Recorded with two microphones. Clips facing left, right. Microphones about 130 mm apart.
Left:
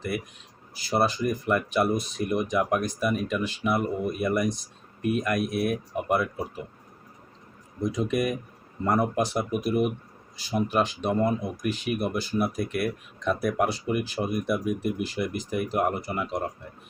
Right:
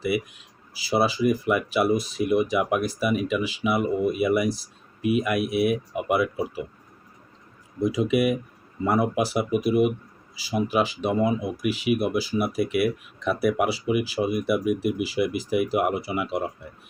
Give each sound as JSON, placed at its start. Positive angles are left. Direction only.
{"t": 0.1, "sound": "speech", "side_deg": -10}
{"t": 7.8, "sound": "speech", "side_deg": -5}